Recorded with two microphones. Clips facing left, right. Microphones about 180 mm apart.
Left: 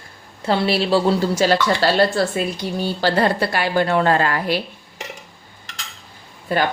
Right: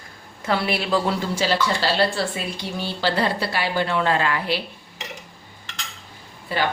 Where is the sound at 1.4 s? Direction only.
50° left (ahead or behind).